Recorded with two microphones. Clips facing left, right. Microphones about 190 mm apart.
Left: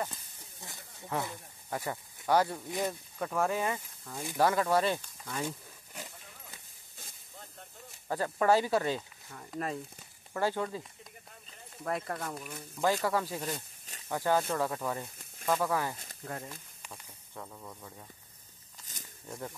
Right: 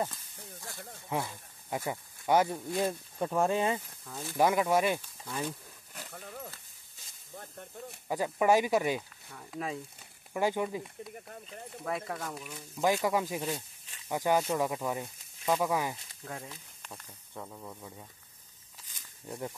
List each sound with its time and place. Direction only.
0.1 s snake: 20° left (ahead or behind)
1.1 s speech: 15° right (ahead or behind)
4.0 s speech: 10° left (ahead or behind)
4.4 s speech: 15° right (ahead or behind)
5.4 s pig: 10° left (ahead or behind)
8.1 s speech: 10° right (ahead or behind)
9.3 s speech: centre (ahead or behind)
10.3 s speech: 15° right (ahead or behind)
11.8 s speech: centre (ahead or behind)
12.8 s speech: 15° right (ahead or behind)
16.3 s speech: centre (ahead or behind)
17.3 s speech: 10° right (ahead or behind)
19.2 s speech: 15° right (ahead or behind)